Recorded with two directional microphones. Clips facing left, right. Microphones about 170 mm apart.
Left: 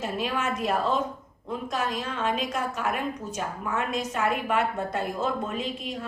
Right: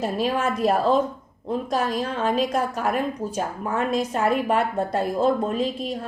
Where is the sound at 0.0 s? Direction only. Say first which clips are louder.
Right 6 dB; 35° right (ahead or behind).